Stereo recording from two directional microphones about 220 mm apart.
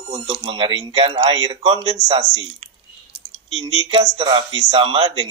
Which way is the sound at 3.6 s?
25° right (ahead or behind).